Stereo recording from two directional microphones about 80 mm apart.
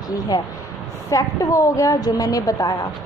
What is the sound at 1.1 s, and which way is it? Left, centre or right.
A woman's voice, left.